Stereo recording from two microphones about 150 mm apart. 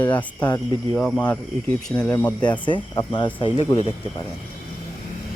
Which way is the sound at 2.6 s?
30° left (ahead or behind).